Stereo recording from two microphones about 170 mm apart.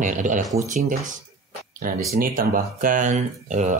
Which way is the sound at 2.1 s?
55° right (ahead or behind).